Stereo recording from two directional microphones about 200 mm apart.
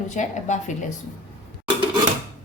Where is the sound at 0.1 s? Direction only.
35° left (ahead or behind).